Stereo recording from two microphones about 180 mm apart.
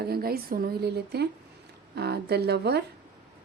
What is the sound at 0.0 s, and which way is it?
Speech, 60° right (ahead or behind).